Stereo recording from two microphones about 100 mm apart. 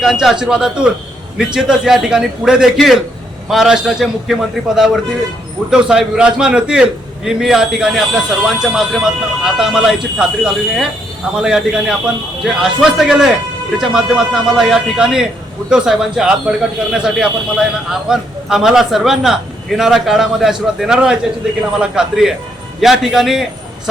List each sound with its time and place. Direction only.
0.0 s a man's voice: centre (ahead or behind)